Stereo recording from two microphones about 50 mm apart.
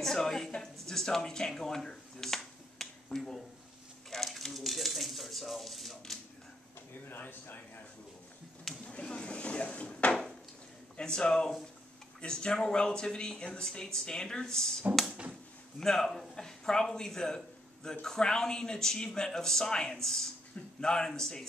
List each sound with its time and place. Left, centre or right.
0.0 s a sound: centre
7.1 s speech: left
8.8 s speech: left
11.0 s speech: centre